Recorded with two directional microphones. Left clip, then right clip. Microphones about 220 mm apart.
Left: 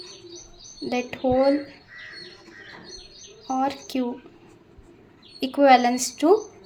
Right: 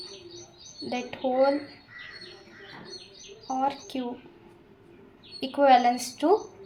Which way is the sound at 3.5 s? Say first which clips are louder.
Left 3 dB; 25° left (ahead or behind).